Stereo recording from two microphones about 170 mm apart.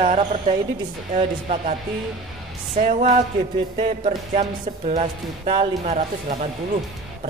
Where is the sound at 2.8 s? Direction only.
45° right (ahead or behind).